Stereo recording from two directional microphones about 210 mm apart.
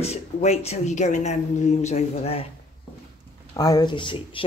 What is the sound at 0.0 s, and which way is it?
Speech, 30° left (ahead or behind).